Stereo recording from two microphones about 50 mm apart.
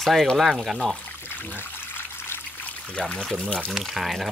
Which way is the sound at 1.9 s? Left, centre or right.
Left.